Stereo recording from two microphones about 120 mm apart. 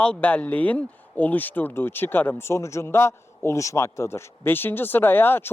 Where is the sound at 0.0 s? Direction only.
10° left (ahead or behind).